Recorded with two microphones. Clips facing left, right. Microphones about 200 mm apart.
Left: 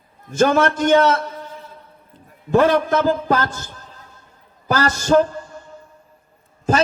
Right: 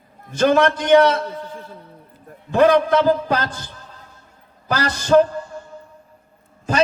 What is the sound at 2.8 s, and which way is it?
Speech, 45° left (ahead or behind).